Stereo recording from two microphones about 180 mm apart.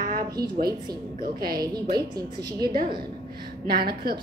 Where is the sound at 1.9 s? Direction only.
20° right (ahead or behind).